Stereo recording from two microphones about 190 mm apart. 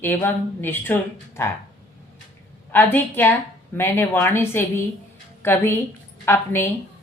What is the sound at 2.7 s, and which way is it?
Speech, 10° left (ahead or behind).